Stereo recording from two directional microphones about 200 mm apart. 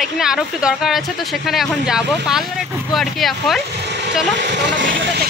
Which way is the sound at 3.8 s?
60° right (ahead or behind).